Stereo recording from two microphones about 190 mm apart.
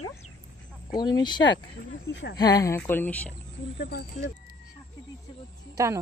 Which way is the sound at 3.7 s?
60° left (ahead or behind).